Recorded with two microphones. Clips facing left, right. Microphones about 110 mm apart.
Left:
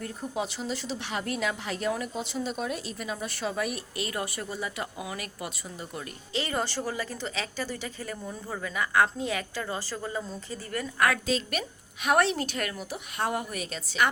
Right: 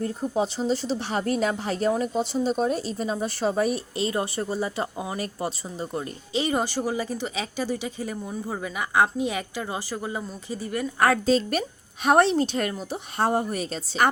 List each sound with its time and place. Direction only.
0.0 s speech: 35° right (ahead or behind)
6.3 s speech: 20° right (ahead or behind)
11.0 s speech: 35° right (ahead or behind)